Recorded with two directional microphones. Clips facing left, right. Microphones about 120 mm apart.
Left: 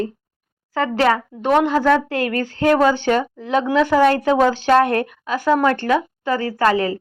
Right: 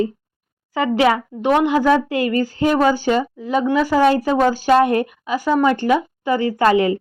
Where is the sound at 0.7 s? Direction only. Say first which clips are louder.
Right 1 dB; 10° right (ahead or behind).